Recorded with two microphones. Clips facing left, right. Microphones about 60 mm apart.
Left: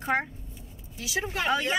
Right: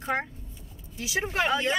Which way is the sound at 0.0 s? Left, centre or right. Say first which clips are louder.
Left 2 dB; centre.